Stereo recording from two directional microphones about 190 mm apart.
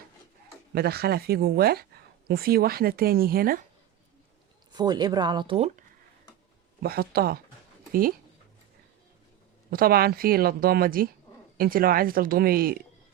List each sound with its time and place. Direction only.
0.7 s speech: 55° right (ahead or behind)
4.7 s speech: 20° right (ahead or behind)
6.8 s speech: 55° right (ahead or behind)
9.6 s speech: 50° right (ahead or behind)